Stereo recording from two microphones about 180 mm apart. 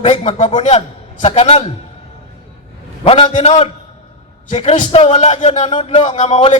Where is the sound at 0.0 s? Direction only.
40° left (ahead or behind).